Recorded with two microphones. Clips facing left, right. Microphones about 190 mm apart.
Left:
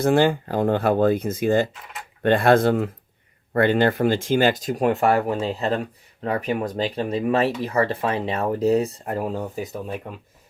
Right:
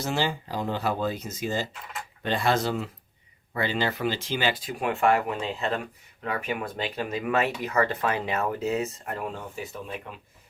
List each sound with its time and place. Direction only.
0.0 s speech: 55° left (ahead or behind)